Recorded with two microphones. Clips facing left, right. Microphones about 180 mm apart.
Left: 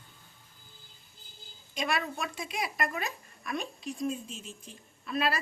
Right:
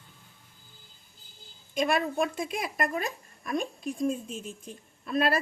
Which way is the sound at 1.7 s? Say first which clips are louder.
Right 6 dB; 50° right (ahead or behind).